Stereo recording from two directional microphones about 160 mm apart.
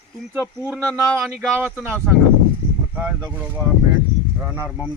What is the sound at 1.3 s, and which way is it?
Speech, 10° right (ahead or behind).